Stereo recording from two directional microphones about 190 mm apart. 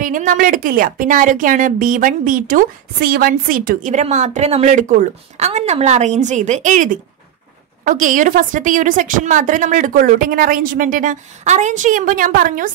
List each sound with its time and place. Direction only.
0.0 s a woman's voice: 45° right (ahead or behind)